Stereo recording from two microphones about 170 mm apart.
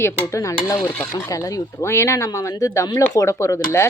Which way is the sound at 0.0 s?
15° left (ahead or behind).